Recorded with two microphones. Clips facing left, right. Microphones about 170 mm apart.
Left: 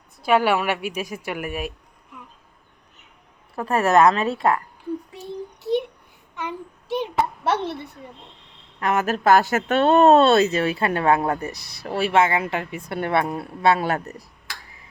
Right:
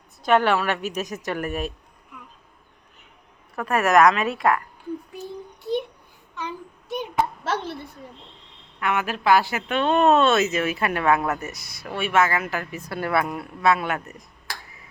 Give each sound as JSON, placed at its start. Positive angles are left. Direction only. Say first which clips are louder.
{"t": 0.2, "sound": "a woman's voice", "louder": "even", "side_deg": 10}
{"t": 3.5, "sound": "a woman's voice", "louder": "left 1 dB", "side_deg": 30}
{"t": 7.4, "sound": "a woman's voice", "louder": "left 4 dB", "side_deg": 70}
{"t": 8.8, "sound": "speech", "louder": "left 4 dB", "side_deg": 40}